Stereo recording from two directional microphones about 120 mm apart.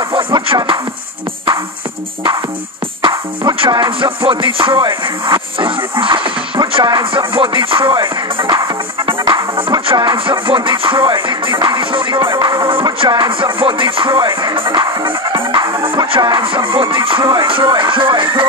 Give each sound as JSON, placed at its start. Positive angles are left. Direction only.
{"t": 0.1, "sound": "music", "side_deg": -45}
{"t": 3.0, "sound": "music", "side_deg": -40}